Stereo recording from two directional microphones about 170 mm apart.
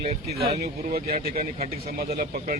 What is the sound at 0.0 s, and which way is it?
Speech, 40° right (ahead or behind).